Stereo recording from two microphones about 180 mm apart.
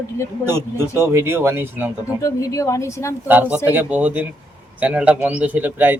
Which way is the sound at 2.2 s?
15° left (ahead or behind).